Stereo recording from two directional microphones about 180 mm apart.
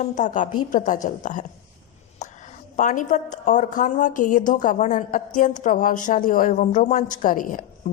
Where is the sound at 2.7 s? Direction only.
45° left (ahead or behind).